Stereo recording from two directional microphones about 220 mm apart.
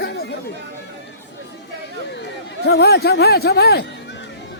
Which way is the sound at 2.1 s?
50° left (ahead or behind).